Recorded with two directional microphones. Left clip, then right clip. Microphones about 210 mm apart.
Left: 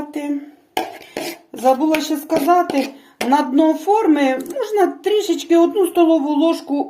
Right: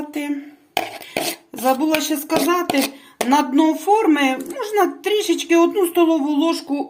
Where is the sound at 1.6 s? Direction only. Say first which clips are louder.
Left 3 dB; 25° right (ahead or behind).